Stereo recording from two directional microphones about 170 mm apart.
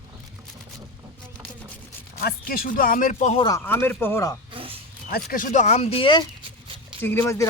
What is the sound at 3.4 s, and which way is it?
Speech, 15° left (ahead or behind).